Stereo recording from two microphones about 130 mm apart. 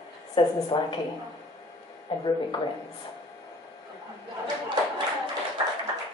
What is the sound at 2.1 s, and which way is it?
Speech, 40° left (ahead or behind).